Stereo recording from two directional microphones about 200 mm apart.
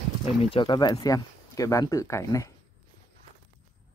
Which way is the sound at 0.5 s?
25° left (ahead or behind).